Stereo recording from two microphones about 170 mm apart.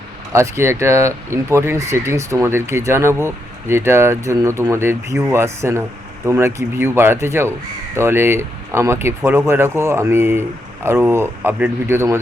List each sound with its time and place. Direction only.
0.3 s speech: 15° right (ahead or behind)